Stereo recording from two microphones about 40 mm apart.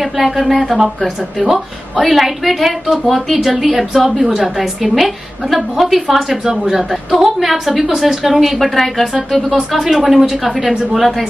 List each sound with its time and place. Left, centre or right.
0.2 s a woman's voice: centre
0.7 s a woman's voice: centre